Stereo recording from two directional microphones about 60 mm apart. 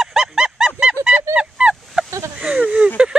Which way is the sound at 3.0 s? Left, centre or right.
Centre.